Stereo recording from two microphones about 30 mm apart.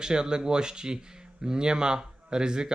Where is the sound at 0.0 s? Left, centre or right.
Right.